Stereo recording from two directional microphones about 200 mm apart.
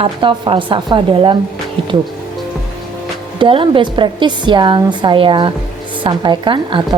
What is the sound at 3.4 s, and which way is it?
Speech, 25° right (ahead or behind).